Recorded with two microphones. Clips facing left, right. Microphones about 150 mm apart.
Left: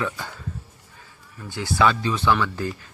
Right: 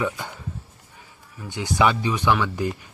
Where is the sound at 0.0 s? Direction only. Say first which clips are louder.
Right 2 dB; 15° right (ahead or behind).